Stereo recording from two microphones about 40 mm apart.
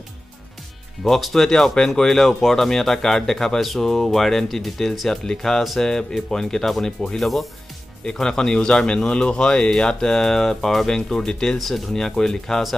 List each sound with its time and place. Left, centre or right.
1.0 s speech: centre
11.5 s speech: centre